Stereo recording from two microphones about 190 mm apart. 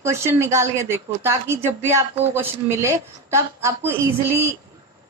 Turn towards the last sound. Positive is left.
turn(degrees=-15)  # may be behind; listen again after turning